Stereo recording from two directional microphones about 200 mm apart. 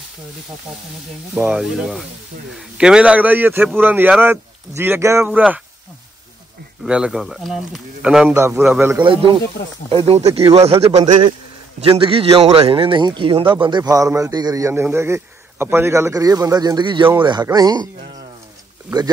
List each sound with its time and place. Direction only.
1.3 s a man's voice: 5° right (ahead or behind)
6.8 s a man's voice: 5° right (ahead or behind)
9.0 s a man's voice: 25° right (ahead or behind)